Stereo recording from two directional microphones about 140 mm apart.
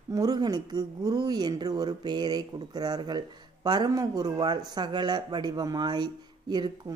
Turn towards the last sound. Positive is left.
turn(degrees=-30)  # may be behind; listen again after turning